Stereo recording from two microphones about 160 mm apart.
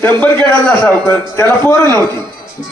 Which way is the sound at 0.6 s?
10° left (ahead or behind).